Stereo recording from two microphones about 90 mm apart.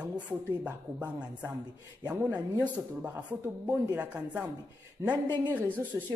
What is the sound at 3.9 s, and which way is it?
Speech, 15° right (ahead or behind).